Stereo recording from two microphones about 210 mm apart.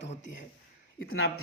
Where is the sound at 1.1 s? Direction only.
50° left (ahead or behind).